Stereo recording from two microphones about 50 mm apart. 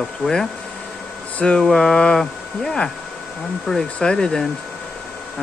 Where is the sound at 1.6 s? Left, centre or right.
Centre.